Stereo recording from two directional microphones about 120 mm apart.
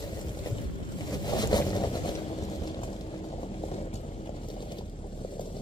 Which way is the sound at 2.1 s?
60° left (ahead or behind).